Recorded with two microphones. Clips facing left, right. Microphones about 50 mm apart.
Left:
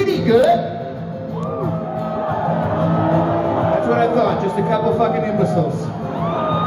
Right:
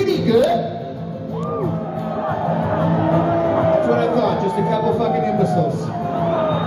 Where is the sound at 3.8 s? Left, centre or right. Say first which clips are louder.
Left 1 dB; left.